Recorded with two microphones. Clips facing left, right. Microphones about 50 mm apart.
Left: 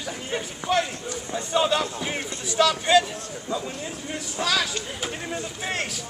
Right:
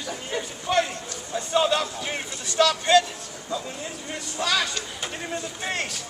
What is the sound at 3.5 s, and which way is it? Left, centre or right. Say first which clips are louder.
Speech: left 1 dB; centre.